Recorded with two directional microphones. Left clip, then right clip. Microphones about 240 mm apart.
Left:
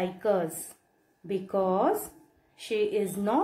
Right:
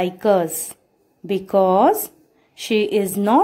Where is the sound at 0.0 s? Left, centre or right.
Right.